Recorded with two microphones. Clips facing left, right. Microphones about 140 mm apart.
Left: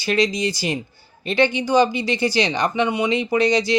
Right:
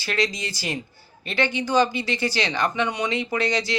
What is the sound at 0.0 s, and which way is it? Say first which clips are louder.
Speech: left 6 dB; 15° left (ahead or behind).